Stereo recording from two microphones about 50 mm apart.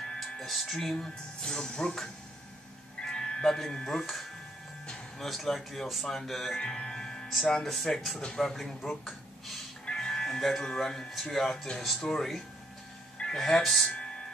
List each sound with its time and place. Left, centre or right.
0.2 s music: centre
0.9 s speech: centre
3.1 s music: centre
3.4 s speech: centre
6.6 s music: centre
7.4 s speech: centre
9.8 s music: centre
10.7 s speech: centre
13.6 s speech: centre
13.8 s music: centre